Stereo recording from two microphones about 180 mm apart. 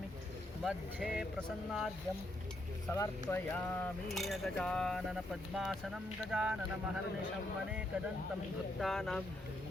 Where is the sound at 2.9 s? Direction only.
15° left (ahead or behind).